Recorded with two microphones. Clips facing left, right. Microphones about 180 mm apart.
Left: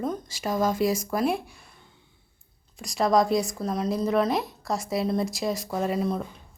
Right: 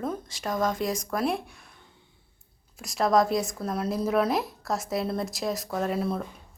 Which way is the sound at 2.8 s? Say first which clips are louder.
Left 1 dB; centre (ahead or behind).